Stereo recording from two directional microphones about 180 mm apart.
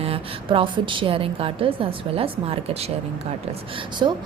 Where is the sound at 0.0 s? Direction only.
30° right (ahead or behind).